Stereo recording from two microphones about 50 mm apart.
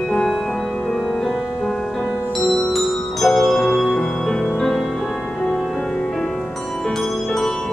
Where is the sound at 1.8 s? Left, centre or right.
Centre.